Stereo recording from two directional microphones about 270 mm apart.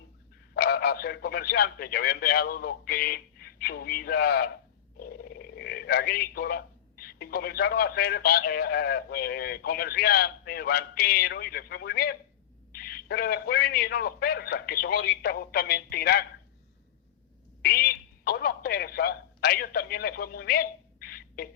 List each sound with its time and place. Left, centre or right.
0.5 s a man's voice: left
17.6 s speech: left